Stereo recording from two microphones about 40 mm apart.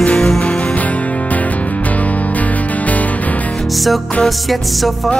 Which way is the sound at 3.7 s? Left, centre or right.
Centre.